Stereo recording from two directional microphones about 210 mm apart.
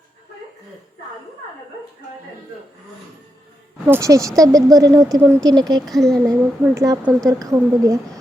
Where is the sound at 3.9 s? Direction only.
15° right (ahead or behind).